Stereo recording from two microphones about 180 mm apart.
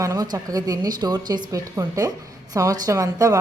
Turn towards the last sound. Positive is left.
turn(degrees=-20)  # may be behind; listen again after turning